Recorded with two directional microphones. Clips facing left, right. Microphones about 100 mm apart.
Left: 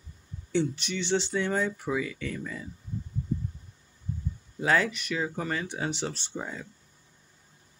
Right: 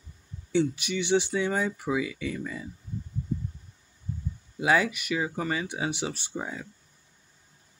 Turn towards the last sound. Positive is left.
turn(degrees=-10)  # may be behind; listen again after turning